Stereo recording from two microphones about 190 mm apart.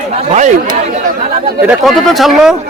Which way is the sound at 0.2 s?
35° right (ahead or behind).